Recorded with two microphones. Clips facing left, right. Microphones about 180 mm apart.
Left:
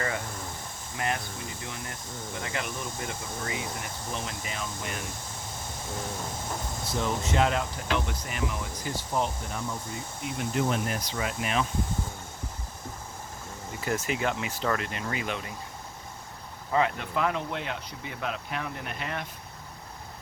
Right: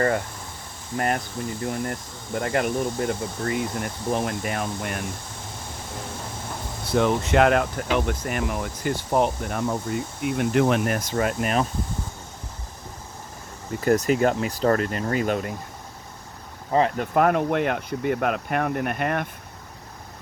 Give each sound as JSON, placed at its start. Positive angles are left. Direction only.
{"t": 0.9, "sound": "speech", "side_deg": -50}
{"t": 6.9, "sound": "speech", "side_deg": -65}
{"t": 13.8, "sound": "speech", "side_deg": -40}
{"t": 16.7, "sound": "speech", "side_deg": -40}
{"t": 17.2, "sound": "speech", "side_deg": -55}